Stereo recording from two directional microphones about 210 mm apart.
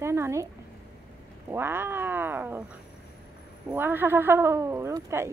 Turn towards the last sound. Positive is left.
turn(degrees=-15)  # may be behind; listen again after turning